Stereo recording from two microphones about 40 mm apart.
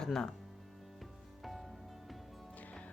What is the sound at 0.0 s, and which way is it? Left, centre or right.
Speech, centre.